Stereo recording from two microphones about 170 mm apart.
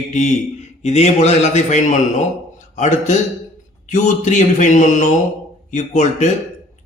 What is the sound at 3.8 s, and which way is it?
Speech, 45° left (ahead or behind).